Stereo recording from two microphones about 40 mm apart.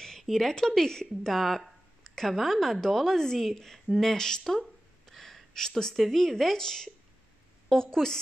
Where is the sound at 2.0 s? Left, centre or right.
Centre.